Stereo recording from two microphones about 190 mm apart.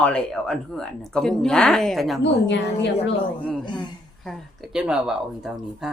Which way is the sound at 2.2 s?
70° left (ahead or behind).